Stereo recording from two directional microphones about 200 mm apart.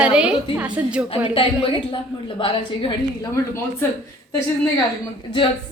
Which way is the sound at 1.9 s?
25° left (ahead or behind).